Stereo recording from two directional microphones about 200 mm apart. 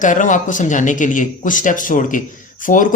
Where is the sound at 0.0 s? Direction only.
40° left (ahead or behind).